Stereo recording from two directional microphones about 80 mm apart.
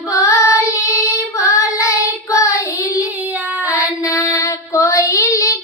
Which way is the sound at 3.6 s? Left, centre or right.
Centre.